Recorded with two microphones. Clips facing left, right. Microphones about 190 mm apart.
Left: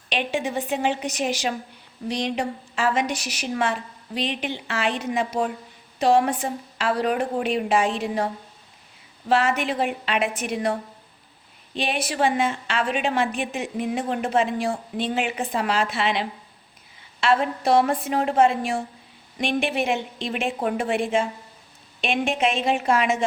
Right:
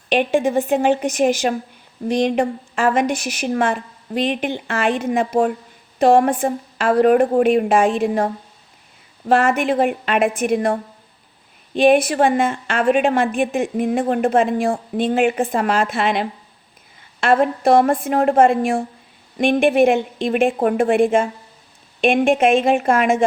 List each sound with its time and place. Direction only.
0.1 s a woman's voice: 50° right (ahead or behind)
9.3 s a woman's voice: 50° right (ahead or behind)